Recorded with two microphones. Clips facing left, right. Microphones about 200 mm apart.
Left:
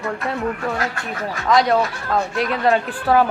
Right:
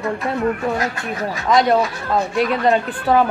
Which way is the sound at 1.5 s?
Centre (ahead or behind).